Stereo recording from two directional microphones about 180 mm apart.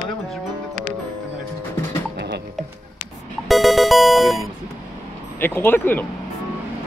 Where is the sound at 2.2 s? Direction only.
65° right (ahead or behind).